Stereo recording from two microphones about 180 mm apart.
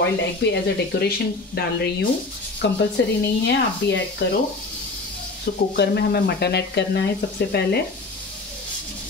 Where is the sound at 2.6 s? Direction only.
80° left.